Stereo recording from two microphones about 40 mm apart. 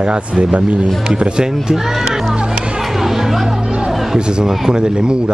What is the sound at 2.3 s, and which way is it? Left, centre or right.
Music, right.